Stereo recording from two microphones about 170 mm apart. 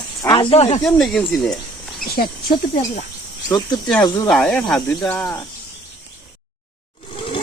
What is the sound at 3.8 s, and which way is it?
Speech, 5° left (ahead or behind).